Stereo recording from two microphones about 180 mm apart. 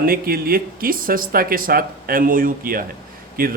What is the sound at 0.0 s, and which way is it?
Speech, 55° right (ahead or behind).